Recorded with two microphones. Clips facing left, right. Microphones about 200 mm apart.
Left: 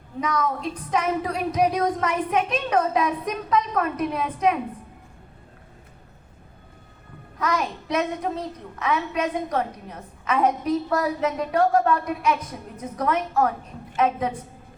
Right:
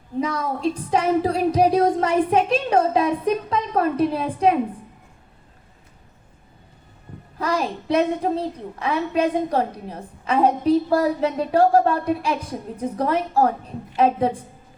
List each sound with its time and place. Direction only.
0.2 s a child's voice: 30° right (ahead or behind)
7.3 s a child's voice: 30° right (ahead or behind)